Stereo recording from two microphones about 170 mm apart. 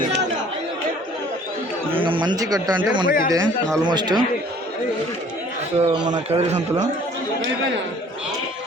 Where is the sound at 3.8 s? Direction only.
25° right (ahead or behind).